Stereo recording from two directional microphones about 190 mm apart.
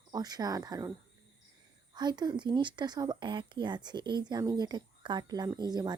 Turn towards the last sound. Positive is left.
turn(degrees=-20)  # may be behind; listen again after turning